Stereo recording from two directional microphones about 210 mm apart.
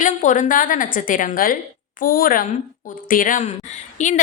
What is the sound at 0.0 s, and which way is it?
A woman's voice, 35° left (ahead or behind).